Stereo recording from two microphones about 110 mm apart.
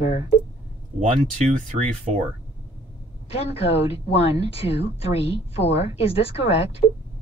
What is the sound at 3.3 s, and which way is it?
A woman's voice, 65° left (ahead or behind).